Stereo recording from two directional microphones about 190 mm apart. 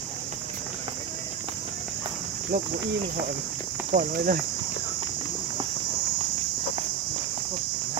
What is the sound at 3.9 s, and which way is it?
Speech, 50° right (ahead or behind).